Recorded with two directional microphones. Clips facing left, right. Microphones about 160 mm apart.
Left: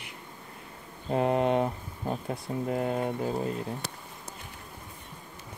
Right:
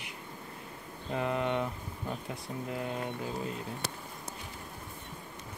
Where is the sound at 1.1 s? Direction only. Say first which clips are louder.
Left 6 dB; 45° left (ahead or behind).